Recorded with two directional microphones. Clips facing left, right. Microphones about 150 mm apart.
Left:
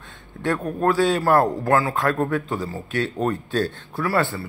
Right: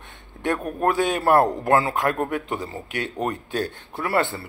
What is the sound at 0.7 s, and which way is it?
A man's voice, 20° right (ahead or behind).